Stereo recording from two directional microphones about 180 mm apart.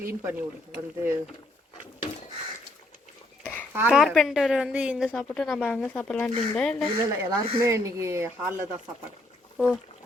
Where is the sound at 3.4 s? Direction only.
10° left (ahead or behind).